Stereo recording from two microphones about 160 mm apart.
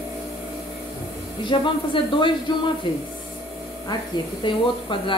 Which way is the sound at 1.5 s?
30° left (ahead or behind).